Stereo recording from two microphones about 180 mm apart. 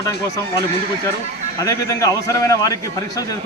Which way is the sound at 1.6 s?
20° left (ahead or behind).